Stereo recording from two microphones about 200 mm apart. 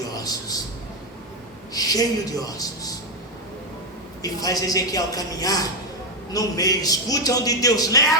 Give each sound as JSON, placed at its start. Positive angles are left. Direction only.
{"t": 0.1, "sound": "a sound", "side_deg": 20}
{"t": 1.7, "sound": "speech", "side_deg": 20}
{"t": 4.2, "sound": "a man's voice", "side_deg": 20}